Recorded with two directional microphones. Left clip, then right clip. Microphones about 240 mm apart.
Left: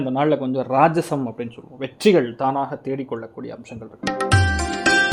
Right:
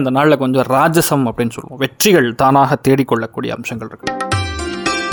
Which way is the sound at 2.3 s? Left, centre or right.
Right.